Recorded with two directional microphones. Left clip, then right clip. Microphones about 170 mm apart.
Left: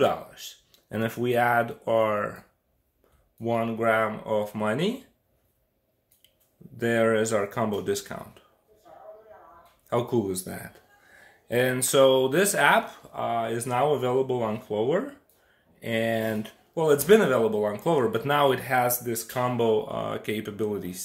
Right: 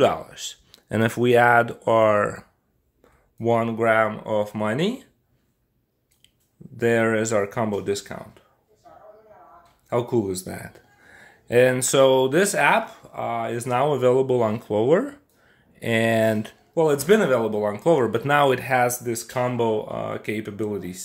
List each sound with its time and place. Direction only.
0.0 s speech: 45° right (ahead or behind)
6.8 s speech: 35° right (ahead or behind)
9.8 s speech: 20° right (ahead or behind)
13.8 s speech: 50° right (ahead or behind)
16.7 s speech: 30° right (ahead or behind)